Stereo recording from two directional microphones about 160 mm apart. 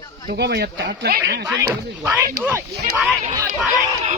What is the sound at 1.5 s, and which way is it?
Speech, 15° right (ahead or behind).